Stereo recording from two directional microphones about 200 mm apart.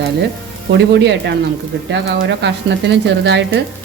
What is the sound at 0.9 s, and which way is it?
Speech, 60° right (ahead or behind).